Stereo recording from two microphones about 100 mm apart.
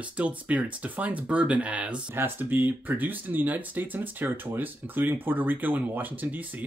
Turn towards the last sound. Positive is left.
turn(degrees=-15)  # may be behind; listen again after turning